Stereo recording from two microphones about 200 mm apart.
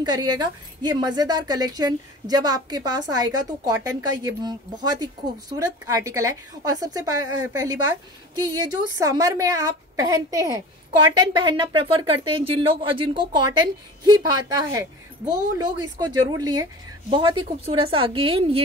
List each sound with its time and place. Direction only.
0.0 s a woman's voice: 20° right (ahead or behind)